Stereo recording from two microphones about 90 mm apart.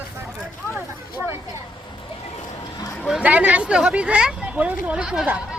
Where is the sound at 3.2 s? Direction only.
15° right (ahead or behind).